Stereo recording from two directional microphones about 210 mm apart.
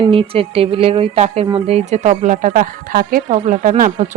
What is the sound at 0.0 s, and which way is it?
Speech, 25° right (ahead or behind).